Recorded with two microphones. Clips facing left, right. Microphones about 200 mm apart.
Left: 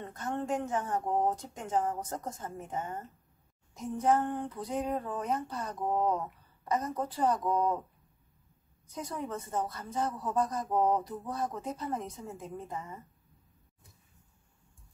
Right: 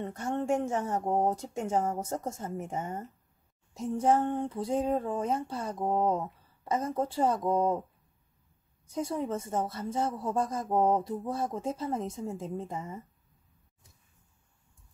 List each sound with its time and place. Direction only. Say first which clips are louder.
0.0 s speech: right 4 dB; 25° right (ahead or behind)
8.9 s speech: right 6 dB; 25° right (ahead or behind)